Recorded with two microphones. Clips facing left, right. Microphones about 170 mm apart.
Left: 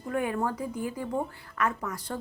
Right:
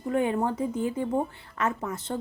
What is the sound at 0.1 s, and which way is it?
Speech, 25° right (ahead or behind).